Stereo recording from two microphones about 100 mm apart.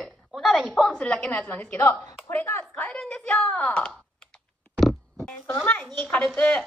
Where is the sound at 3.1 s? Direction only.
10° left (ahead or behind).